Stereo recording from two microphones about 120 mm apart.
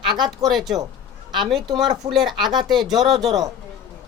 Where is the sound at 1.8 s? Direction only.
35° right (ahead or behind).